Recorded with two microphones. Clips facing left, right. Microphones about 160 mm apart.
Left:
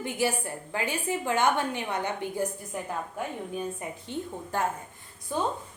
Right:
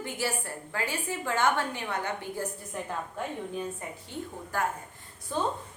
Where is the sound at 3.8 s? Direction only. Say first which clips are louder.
Left 3 dB; 20° left (ahead or behind).